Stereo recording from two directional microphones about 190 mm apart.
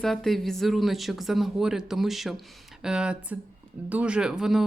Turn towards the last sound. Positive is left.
turn(degrees=0)  # may be behind; listen again after turning